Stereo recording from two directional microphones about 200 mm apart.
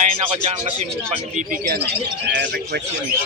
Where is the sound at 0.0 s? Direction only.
30° right (ahead or behind).